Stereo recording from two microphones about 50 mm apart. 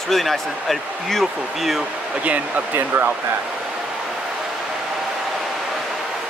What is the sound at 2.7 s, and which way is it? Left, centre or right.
Speech, right.